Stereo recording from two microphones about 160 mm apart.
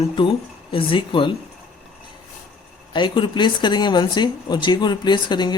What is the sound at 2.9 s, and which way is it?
Speech, 30° left (ahead or behind).